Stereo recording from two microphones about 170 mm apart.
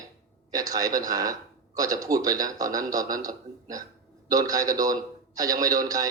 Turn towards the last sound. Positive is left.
turn(degrees=-20)  # may be behind; listen again after turning